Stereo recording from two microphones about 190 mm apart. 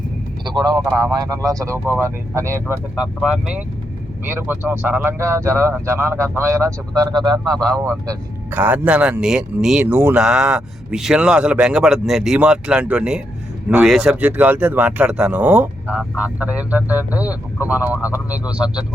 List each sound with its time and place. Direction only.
0.4 s a man's voice: 25° right (ahead or behind); by 18.9 s 5° right (ahead or behind)